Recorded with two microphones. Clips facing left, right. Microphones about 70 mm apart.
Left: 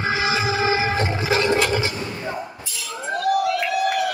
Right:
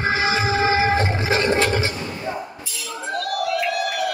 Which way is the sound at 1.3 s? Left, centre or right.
Right.